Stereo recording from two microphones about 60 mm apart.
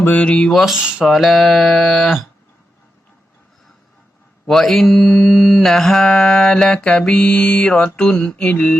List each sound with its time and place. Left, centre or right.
0.0 s a sound: left
0.5 s mantra: centre
0.8 s speech: centre
1.0 s mantra: centre
4.4 s mantra: centre; by 8.7 s left